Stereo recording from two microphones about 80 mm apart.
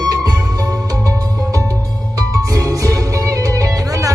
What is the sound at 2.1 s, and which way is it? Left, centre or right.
Music, right.